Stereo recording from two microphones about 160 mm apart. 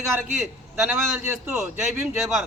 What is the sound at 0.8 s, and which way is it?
A man's voice, 10° right (ahead or behind).